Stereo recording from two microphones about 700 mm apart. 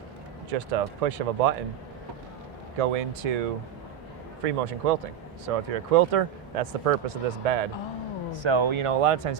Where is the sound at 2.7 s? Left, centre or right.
Right.